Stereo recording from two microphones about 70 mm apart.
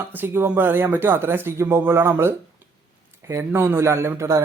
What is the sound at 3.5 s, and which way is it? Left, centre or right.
Speech, right.